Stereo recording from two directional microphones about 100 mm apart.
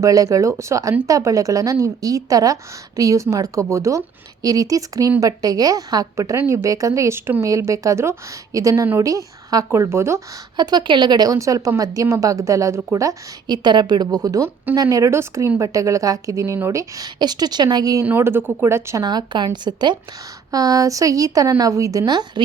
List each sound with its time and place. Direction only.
0.0 s a woman's voice: 35° right (ahead or behind)
10.6 s a woman's voice: 45° right (ahead or behind)
13.7 s a woman's voice: 45° right (ahead or behind)
17.2 s speech: 45° right (ahead or behind)
18.0 s speech: 20° right (ahead or behind)
19.0 s speech: 45° right (ahead or behind)
20.5 s a woman's voice: 40° right (ahead or behind)